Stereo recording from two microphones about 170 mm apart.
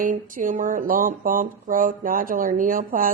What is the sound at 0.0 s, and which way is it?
Speech, 50° right (ahead or behind).